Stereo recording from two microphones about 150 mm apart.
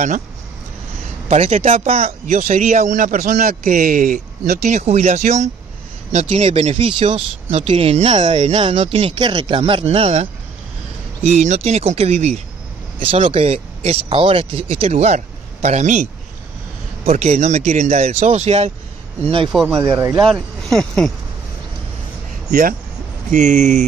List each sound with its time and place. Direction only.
1.3 s speech: 45° right (ahead or behind)
3.4 s speech: 70° right (ahead or behind)
4.6 s speech: 50° right (ahead or behind)
8.5 s speech: 40° right (ahead or behind)
11.2 s speech: 50° right (ahead or behind)
19.2 s speech: 35° right (ahead or behind)
20.6 s speech: 5° left (ahead or behind)
22.5 s speech: 70° right (ahead or behind)
23.3 s speech: 55° right (ahead or behind)